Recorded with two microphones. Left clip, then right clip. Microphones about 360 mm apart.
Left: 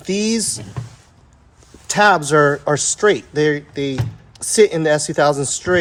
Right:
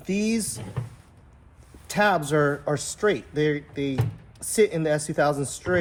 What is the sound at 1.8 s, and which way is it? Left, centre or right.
Speech, left.